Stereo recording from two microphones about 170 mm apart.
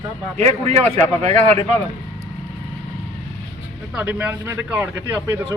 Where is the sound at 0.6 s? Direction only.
40° right (ahead or behind).